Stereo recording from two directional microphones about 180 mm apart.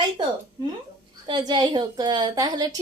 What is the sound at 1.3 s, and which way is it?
A woman's voice, 25° right (ahead or behind).